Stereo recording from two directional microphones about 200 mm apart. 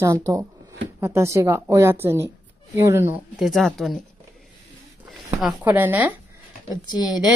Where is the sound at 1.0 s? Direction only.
15° right (ahead or behind).